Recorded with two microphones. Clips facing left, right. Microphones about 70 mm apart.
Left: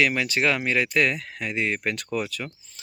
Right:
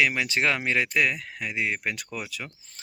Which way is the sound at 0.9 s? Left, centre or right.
Centre.